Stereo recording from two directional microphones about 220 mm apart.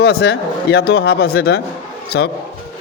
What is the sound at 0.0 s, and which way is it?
Speech, 45° left (ahead or behind).